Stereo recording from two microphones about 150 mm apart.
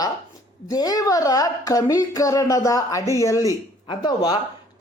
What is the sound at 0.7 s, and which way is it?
A woman's voice, 25° left (ahead or behind).